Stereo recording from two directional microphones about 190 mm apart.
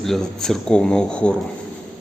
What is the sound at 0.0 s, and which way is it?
Speech, centre (ahead or behind).